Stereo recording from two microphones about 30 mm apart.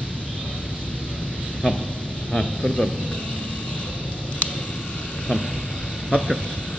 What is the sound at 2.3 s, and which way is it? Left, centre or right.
Speech, centre.